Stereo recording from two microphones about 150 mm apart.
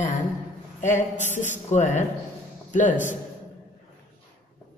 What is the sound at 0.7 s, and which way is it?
A man's voice, 55° left (ahead or behind).